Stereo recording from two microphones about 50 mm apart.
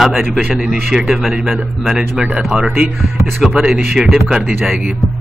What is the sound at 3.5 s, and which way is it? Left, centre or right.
Speech, centre.